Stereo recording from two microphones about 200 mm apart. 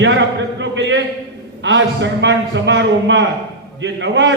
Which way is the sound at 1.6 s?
65° right (ahead or behind).